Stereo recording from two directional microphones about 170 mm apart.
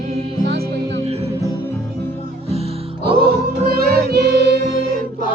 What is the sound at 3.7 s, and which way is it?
Music, 65° right (ahead or behind).